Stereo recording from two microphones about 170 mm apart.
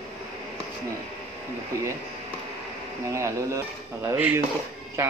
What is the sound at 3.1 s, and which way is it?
Speech, 20° right (ahead or behind).